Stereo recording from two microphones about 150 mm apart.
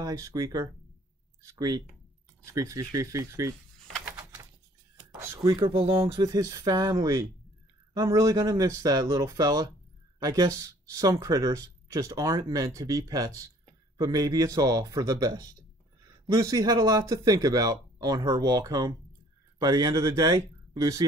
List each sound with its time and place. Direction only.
0.0 s speech: 25° right (ahead or behind)
5.3 s speech: 20° right (ahead or behind)
5.7 s speech: 35° right (ahead or behind)